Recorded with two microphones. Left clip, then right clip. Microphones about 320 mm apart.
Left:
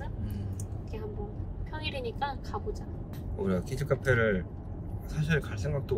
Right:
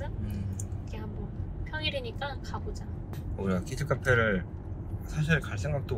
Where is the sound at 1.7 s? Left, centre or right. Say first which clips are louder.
Right 4 dB; centre.